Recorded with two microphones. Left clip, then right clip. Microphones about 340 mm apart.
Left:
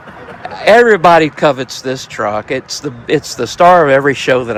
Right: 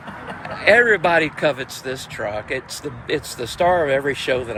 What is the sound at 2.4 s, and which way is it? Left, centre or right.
Speech, left.